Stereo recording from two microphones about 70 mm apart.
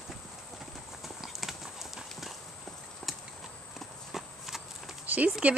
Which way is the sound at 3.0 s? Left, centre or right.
Centre.